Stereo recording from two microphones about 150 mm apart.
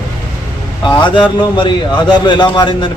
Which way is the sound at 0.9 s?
30° left (ahead or behind).